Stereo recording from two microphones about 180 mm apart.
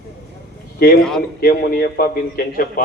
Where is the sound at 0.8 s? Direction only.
60° left (ahead or behind).